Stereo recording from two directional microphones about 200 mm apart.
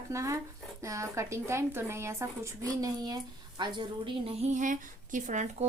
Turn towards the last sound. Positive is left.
turn(degrees=-40)  # may be behind; listen again after turning